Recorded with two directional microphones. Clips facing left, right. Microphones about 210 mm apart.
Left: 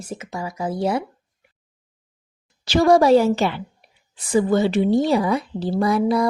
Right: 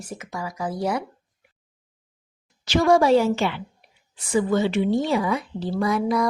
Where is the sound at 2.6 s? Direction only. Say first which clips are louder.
Left 3 dB; 35° left (ahead or behind).